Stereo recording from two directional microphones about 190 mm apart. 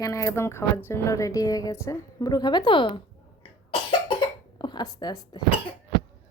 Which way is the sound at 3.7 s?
25° left (ahead or behind).